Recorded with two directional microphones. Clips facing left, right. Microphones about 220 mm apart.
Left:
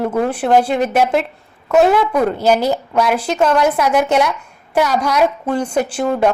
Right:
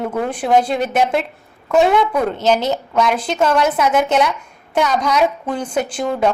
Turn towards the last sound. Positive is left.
turn(degrees=5)  # may be behind; listen again after turning